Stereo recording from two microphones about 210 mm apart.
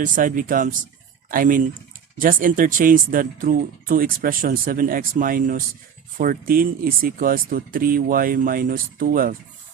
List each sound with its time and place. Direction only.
0.0 s speech: 40° right (ahead or behind)